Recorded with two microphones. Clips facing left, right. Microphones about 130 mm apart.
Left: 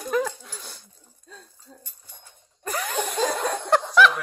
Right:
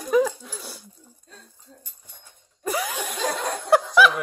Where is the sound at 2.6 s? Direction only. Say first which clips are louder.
Right 3 dB; 5° right (ahead or behind).